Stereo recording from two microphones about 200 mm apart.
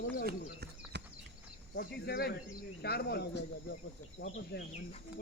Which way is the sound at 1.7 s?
50° left (ahead or behind).